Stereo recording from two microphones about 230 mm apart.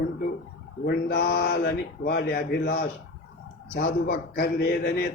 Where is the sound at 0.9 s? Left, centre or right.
Left.